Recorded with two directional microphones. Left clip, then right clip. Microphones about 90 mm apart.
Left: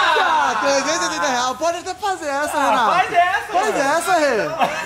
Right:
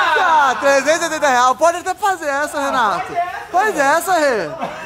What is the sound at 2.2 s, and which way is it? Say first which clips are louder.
A woman's voice: even; 15° right (ahead or behind).